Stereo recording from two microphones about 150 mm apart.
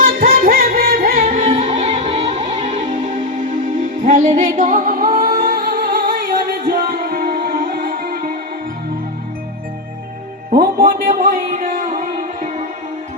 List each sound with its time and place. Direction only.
0.0 s music: 70° right (ahead or behind)
10.8 s music: 65° right (ahead or behind)